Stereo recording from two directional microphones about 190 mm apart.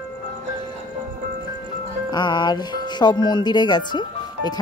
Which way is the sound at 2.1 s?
25° left (ahead or behind).